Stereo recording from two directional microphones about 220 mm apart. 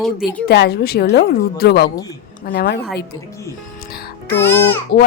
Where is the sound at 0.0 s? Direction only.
Centre (ahead or behind).